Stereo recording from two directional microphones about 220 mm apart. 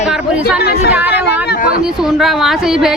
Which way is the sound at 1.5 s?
40° left (ahead or behind).